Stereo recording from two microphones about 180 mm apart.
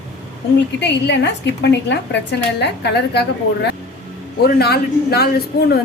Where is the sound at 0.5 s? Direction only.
75° left (ahead or behind).